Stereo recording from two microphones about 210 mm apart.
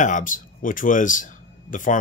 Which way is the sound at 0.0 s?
40° left (ahead or behind).